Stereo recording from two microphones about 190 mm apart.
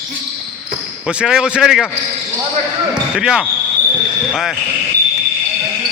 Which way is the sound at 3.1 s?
5° right (ahead or behind).